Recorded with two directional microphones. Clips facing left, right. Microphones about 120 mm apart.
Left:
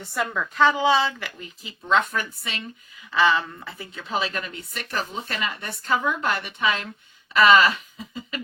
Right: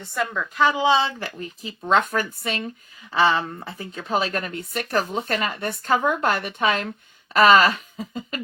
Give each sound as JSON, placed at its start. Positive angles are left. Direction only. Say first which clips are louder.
{"t": 0.0, "sound": "a woman's voice", "louder": "right 1 dB", "side_deg": 10}
{"t": 0.3, "sound": "a woman's voice", "louder": "left 1 dB", "side_deg": 0}
{"t": 0.7, "sound": "speech", "louder": "right 1 dB", "side_deg": -20}
{"t": 1.2, "sound": "speech", "louder": "right 5 dB", "side_deg": -40}